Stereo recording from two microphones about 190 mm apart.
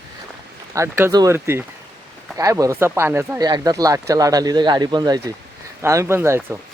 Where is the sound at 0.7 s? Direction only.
15° right (ahead or behind).